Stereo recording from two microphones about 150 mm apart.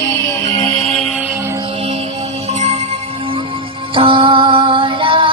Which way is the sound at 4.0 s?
35° right (ahead or behind).